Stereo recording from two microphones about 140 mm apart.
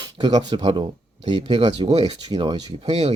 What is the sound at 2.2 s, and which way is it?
Speech, 35° right (ahead or behind).